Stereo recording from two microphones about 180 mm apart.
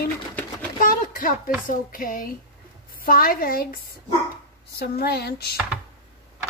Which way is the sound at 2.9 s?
55° left (ahead or behind).